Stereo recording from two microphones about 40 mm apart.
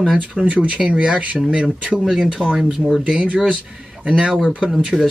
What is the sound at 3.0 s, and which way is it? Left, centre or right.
Speech, right.